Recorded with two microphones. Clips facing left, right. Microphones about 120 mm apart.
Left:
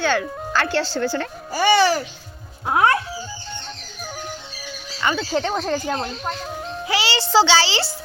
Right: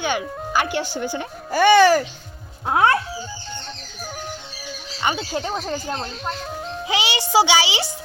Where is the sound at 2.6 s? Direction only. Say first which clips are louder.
Even; 25° right (ahead or behind).